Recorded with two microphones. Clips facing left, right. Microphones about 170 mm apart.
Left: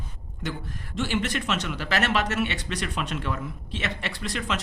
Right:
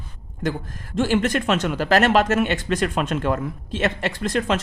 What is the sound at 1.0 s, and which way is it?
Speech, 45° right (ahead or behind).